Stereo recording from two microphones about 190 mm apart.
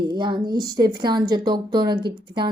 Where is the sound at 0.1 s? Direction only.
25° right (ahead or behind).